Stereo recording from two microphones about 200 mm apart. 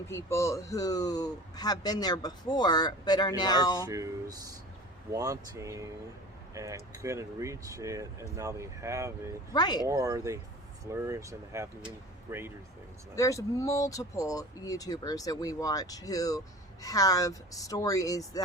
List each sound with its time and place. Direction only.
0.1 s speech: 15° left (ahead or behind)
3.8 s speech: 15° right (ahead or behind)
9.5 s speech: 20° left (ahead or behind)
9.8 s speech: 15° right (ahead or behind)
13.1 s speech: 15° left (ahead or behind)